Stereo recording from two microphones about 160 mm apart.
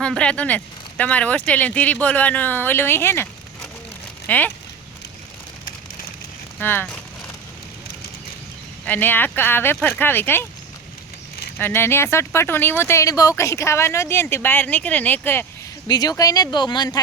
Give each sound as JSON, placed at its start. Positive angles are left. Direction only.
{"t": 0.0, "sound": "speech", "side_deg": 5}
{"t": 6.6, "sound": "speech", "side_deg": 10}
{"t": 8.9, "sound": "speech", "side_deg": 10}
{"t": 11.5, "sound": "speech", "side_deg": 15}
{"t": 15.9, "sound": "speech", "side_deg": 25}